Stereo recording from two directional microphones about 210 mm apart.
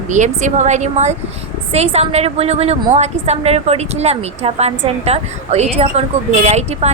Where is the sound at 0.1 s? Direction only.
35° right (ahead or behind).